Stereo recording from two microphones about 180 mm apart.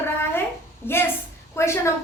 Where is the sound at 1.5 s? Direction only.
15° left (ahead or behind).